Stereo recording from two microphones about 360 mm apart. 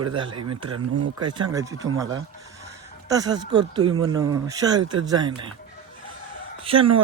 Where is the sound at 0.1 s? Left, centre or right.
Centre.